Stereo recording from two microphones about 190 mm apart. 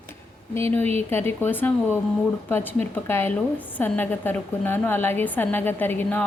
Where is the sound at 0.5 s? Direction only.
10° left (ahead or behind).